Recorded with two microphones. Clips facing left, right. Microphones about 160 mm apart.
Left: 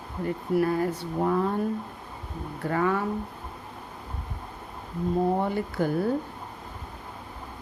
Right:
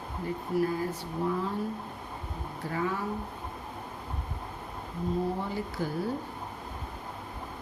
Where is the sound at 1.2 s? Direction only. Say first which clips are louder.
Left 6 dB; 60° left (ahead or behind).